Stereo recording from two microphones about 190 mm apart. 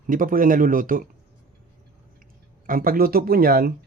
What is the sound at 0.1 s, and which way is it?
Speech, 45° right (ahead or behind).